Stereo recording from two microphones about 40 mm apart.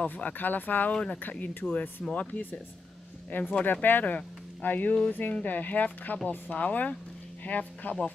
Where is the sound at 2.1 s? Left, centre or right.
Left.